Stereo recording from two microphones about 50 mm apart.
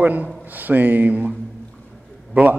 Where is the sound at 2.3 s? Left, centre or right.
Right.